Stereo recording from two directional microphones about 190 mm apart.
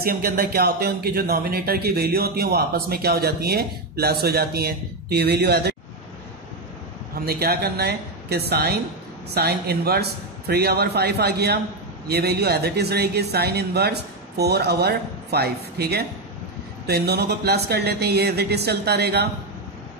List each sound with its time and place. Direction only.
0.0 s speech: 50° right (ahead or behind)
7.2 s speech: 55° right (ahead or behind)